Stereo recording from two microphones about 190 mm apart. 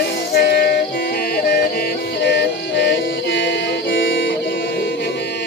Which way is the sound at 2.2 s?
60° left (ahead or behind).